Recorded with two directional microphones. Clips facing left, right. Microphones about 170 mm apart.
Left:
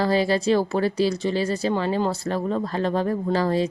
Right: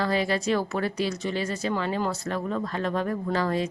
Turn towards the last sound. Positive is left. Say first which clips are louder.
# left 4 dB
turn(degrees=30)  # may be behind; listen again after turning